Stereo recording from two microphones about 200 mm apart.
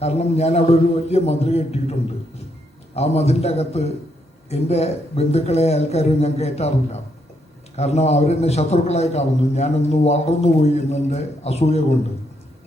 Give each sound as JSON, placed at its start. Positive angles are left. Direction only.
{"t": 0.0, "sound": "a man's voice", "side_deg": 30}